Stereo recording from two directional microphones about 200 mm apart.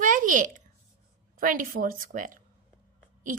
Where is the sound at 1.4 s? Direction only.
45° right (ahead or behind).